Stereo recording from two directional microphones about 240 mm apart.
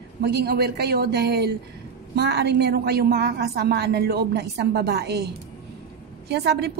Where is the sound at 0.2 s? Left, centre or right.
Right.